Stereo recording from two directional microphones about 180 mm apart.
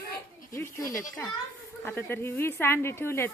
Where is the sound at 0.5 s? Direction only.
15° left (ahead or behind).